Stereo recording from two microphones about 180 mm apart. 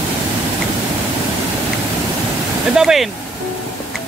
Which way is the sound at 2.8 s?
Centre (ahead or behind).